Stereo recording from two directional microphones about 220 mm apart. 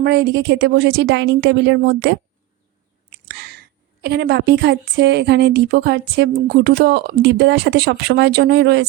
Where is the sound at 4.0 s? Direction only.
45° right (ahead or behind).